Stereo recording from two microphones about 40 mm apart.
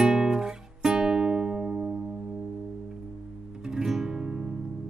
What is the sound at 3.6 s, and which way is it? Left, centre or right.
Guitar, centre.